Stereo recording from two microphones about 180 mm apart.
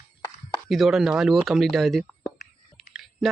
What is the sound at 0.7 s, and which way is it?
Speech, centre (ahead or behind).